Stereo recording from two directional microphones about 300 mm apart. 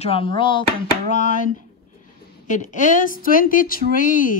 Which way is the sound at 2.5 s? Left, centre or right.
Left.